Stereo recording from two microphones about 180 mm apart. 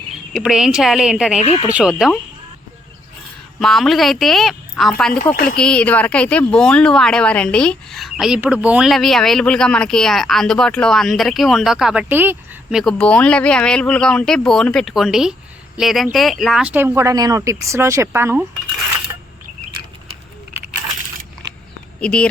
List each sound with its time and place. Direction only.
0.3 s a woman's voice: centre (ahead or behind)
1.4 s speech: 35° left (ahead or behind)
1.7 s a woman's voice: 5° right (ahead or behind)
3.6 s a woman's voice: centre (ahead or behind)
12.8 s a woman's voice: 5° left (ahead or behind); by 18.4 s 15° right (ahead or behind)
22.0 s a woman's voice: 5° left (ahead or behind)